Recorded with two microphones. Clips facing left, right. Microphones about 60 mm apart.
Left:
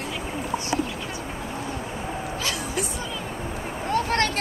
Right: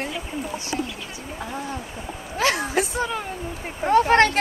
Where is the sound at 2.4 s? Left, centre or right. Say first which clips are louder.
Right 10 dB; right.